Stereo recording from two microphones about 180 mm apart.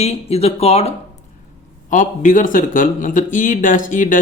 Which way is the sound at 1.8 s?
45° left (ahead or behind).